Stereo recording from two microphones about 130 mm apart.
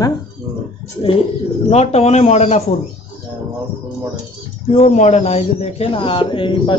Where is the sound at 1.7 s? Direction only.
55° left (ahead or behind).